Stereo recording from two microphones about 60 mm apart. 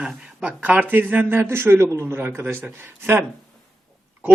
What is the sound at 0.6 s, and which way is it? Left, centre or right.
Speech, right.